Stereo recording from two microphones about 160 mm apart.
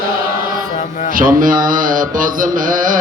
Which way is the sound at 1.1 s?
60° right (ahead or behind).